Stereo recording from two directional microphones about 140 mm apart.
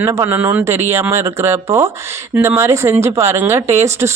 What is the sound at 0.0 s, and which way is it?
Speech, 20° right (ahead or behind).